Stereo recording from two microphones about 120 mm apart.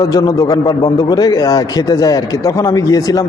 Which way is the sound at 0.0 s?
30° left (ahead or behind).